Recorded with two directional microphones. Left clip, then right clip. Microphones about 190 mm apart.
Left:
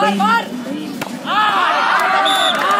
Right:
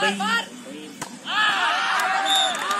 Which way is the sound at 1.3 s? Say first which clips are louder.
Left 6 dB; 50° left (ahead or behind).